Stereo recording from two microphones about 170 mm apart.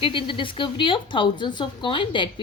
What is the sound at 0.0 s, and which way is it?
A woman's voice, 30° left (ahead or behind).